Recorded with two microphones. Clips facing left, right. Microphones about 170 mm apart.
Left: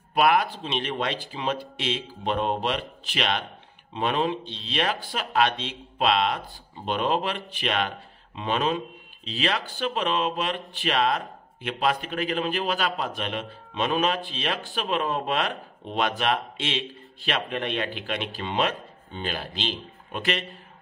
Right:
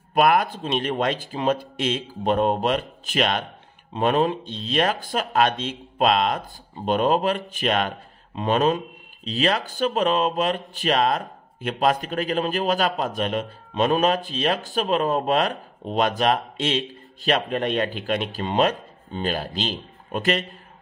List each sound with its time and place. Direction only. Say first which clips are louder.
0.1 s a man's voice: right 3 dB; 45° right (ahead or behind)